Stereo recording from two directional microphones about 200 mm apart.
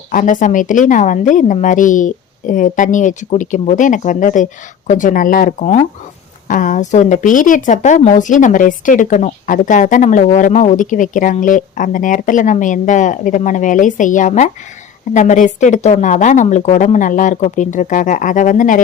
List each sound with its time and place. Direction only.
0.1 s speech: 40° left (ahead or behind)